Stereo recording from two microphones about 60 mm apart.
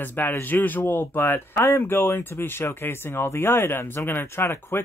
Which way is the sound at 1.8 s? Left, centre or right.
Left.